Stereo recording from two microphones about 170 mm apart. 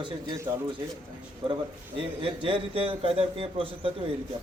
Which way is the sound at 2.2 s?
30° right (ahead or behind).